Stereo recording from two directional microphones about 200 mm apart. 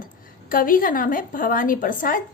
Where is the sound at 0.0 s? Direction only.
45° left (ahead or behind).